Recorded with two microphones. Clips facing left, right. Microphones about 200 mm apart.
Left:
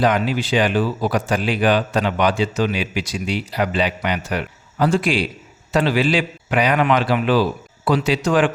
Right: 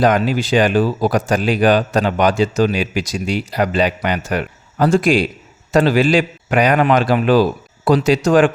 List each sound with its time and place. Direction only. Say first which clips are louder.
0.0 s speech: right 3 dB; 45° right (ahead or behind)